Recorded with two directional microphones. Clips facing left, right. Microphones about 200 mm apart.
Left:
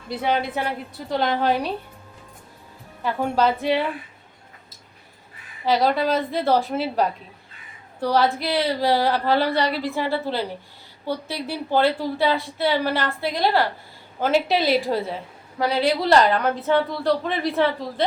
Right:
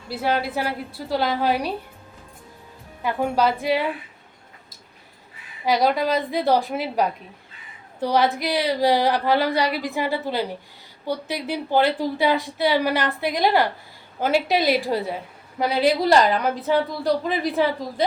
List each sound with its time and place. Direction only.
0.1 s a woman's voice: 5° right (ahead or behind)
3.0 s a woman's voice: 15° right (ahead or behind)
5.6 s a woman's voice: 10° right (ahead or behind)
16.3 s a woman's voice: centre (ahead or behind)